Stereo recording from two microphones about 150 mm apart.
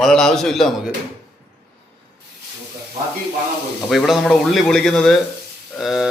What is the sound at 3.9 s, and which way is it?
Speech, centre (ahead or behind).